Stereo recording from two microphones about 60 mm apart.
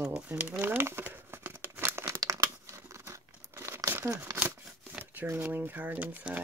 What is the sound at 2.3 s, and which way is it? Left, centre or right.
Tearing, right.